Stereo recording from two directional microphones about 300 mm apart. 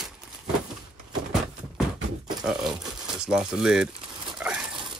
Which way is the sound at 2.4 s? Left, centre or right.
Centre.